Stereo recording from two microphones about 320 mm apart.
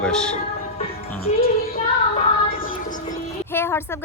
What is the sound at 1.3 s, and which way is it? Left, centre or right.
Music, left.